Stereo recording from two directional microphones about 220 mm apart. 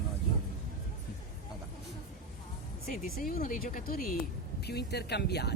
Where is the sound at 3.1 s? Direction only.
40° left (ahead or behind).